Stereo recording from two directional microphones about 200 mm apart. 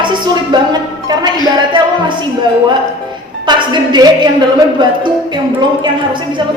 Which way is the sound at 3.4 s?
20° right (ahead or behind).